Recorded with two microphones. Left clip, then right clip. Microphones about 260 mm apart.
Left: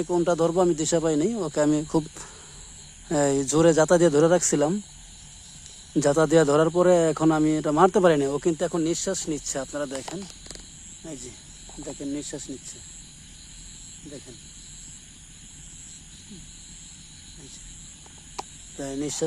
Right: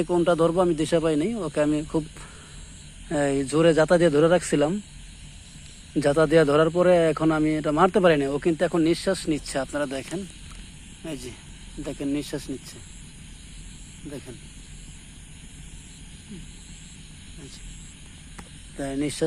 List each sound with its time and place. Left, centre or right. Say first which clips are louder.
0.0 s speech: right 2 dB; centre
6.0 s speech: right 1 dB; left
11.8 s speech: right 4 dB; centre
18.8 s speech: right 3 dB; centre